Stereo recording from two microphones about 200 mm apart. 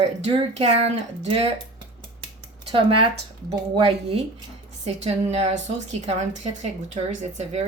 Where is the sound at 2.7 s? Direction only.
25° right (ahead or behind).